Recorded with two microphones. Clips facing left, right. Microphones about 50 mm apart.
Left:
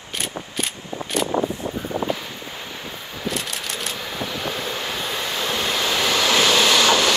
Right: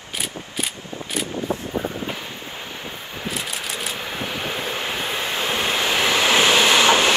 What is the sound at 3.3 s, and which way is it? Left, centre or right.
Vehicle, centre.